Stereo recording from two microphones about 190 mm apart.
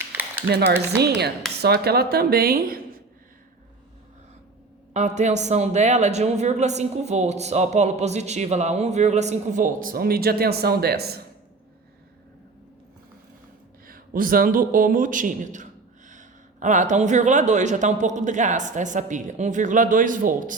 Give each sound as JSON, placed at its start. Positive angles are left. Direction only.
{"t": 1.0, "sound": "a woman's voice", "side_deg": -60}
{"t": 4.9, "sound": "a man's voice", "side_deg": -35}
{"t": 13.8, "sound": "a man's voice", "side_deg": -50}